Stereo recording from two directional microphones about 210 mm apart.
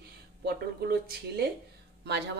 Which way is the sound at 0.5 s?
50° right (ahead or behind).